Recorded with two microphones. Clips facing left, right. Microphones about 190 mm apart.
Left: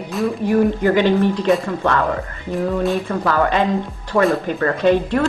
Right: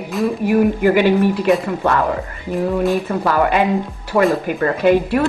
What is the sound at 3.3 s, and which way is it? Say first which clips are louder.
Speech: right 1 dB; 15° right (ahead or behind).